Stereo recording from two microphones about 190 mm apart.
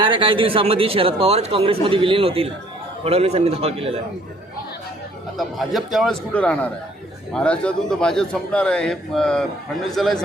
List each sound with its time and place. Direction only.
0.0 s a man's voice: 25° right (ahead or behind)
5.4 s a man's voice: centre (ahead or behind)